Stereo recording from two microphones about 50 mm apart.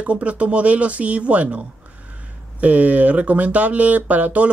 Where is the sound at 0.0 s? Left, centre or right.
Right.